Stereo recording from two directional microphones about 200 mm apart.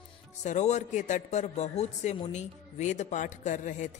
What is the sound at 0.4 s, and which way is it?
Speech, 35° left (ahead or behind).